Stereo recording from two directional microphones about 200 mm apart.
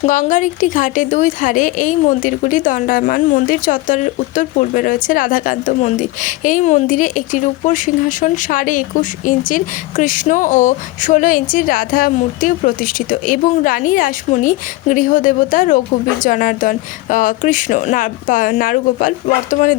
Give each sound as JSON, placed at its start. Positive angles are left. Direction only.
{"t": 0.0, "sound": "a woman's voice", "side_deg": 40}